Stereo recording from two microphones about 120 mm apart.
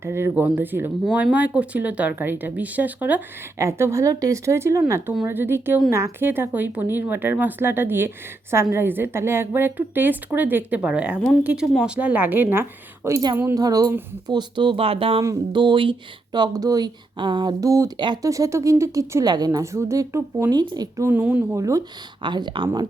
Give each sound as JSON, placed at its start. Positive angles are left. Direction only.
{"t": 0.0, "sound": "a woman's voice", "side_deg": -20}
{"t": 13.6, "sound": "speech", "side_deg": -30}
{"t": 17.9, "sound": "a woman's voice", "side_deg": -40}
{"t": 21.0, "sound": "speech", "side_deg": -15}
{"t": 21.5, "sound": "a woman's voice", "side_deg": -30}
{"t": 22.2, "sound": "speech", "side_deg": -40}